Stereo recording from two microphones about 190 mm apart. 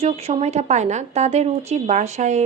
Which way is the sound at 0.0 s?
35° right (ahead or behind).